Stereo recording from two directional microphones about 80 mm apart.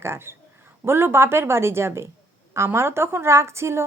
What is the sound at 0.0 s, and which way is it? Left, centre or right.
Speech, right.